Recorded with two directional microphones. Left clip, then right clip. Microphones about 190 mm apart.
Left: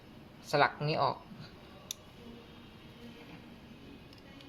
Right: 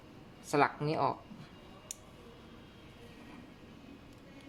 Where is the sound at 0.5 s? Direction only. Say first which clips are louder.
Left 1 dB; 25° right (ahead or behind).